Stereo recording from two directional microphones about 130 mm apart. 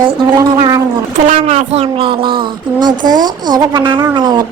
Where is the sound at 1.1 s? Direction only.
60° right (ahead or behind).